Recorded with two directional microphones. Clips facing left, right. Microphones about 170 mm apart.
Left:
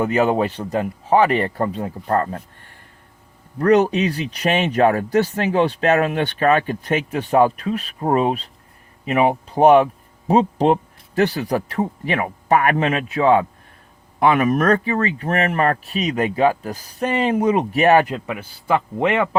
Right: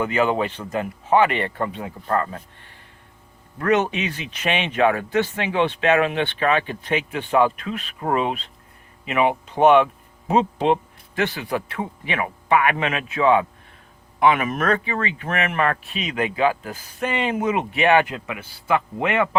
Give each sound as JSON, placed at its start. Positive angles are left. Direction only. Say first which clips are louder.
{"t": 0.0, "sound": "speech", "louder": "left 3 dB", "side_deg": 40}